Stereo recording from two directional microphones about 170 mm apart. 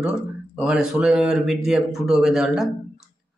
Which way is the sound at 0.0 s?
5° right (ahead or behind).